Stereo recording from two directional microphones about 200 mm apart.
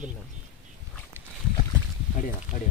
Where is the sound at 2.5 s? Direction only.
40° left (ahead or behind).